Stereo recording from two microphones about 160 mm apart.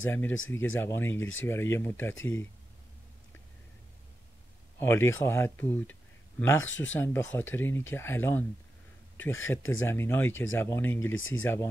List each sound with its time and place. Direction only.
0.1 s speech: 15° left (ahead or behind)
4.7 s speech: 15° left (ahead or behind)